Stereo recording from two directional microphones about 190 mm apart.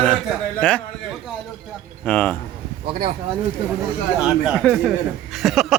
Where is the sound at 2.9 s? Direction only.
30° right (ahead or behind).